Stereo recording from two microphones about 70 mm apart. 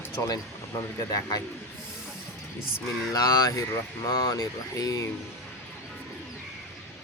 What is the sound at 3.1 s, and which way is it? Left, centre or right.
Speech, left.